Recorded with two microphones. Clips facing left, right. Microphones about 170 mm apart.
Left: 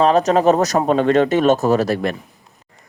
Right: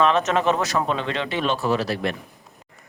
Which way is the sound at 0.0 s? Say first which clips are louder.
Left 6 dB; 35° left (ahead or behind).